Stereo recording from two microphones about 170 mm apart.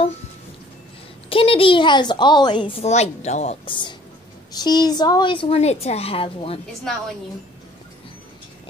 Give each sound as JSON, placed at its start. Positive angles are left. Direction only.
{"t": 1.3, "sound": "a woman's voice", "side_deg": 30}